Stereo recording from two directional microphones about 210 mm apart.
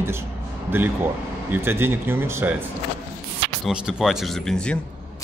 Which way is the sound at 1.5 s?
10° right (ahead or behind).